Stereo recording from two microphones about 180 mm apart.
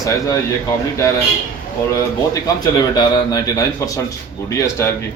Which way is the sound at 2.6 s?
20° left (ahead or behind).